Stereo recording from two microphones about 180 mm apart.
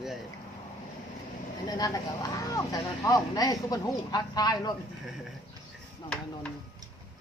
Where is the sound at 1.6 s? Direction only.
20° left (ahead or behind).